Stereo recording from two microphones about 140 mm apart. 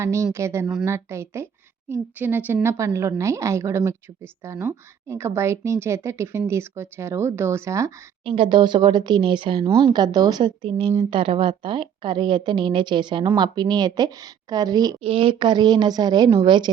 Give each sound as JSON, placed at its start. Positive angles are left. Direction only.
{"t": 0.0, "sound": "a woman's voice", "side_deg": -20}
{"t": 8.2, "sound": "speech", "side_deg": -40}